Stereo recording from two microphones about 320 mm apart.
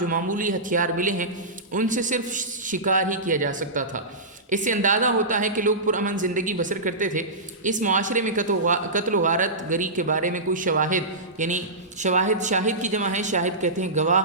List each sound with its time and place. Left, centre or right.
0.1 s a woman's voice: right